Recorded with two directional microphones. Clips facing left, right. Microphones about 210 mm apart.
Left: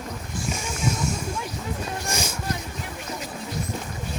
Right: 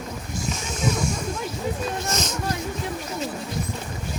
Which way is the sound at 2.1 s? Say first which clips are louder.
Right 2 dB; 10° left (ahead or behind).